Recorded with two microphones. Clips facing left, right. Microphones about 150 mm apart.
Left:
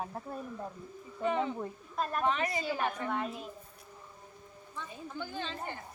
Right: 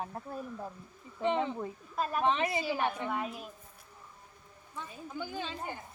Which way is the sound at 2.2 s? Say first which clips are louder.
Right 2 dB; 25° right (ahead or behind).